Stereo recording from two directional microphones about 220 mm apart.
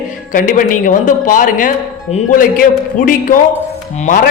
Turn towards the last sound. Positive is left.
turn(degrees=35)  # may be behind; listen again after turning